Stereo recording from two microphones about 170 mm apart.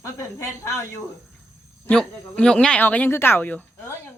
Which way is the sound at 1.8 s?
5° left (ahead or behind).